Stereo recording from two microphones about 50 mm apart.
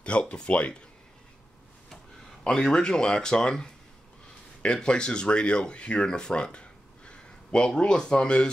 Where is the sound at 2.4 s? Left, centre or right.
Centre.